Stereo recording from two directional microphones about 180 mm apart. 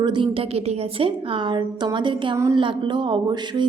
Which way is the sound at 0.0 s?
25° right (ahead or behind).